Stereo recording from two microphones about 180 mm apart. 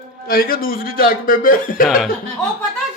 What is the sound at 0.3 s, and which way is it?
A man's voice, 55° left (ahead or behind).